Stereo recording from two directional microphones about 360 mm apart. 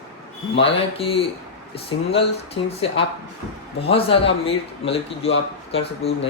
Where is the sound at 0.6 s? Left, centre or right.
Centre.